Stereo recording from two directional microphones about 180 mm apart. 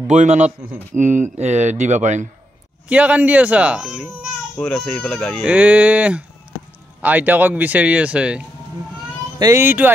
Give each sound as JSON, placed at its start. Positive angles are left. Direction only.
{"t": 0.0, "sound": "speech", "side_deg": -40}
{"t": 2.9, "sound": "a child's voice", "side_deg": -5}
{"t": 5.4, "sound": "speech", "side_deg": -10}